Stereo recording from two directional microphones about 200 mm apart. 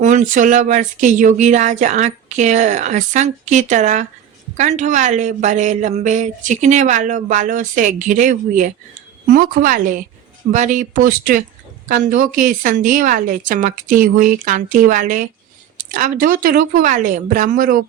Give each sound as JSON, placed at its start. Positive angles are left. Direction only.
{"t": 0.0, "sound": "speech", "side_deg": -40}